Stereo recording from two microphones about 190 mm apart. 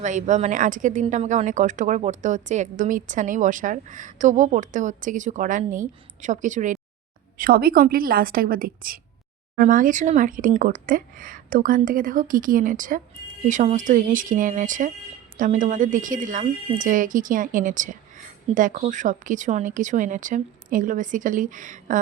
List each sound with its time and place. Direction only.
0.0 s a woman's voice: 40° right (ahead or behind)